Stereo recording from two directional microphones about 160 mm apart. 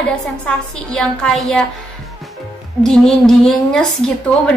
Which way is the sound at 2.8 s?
5° left (ahead or behind).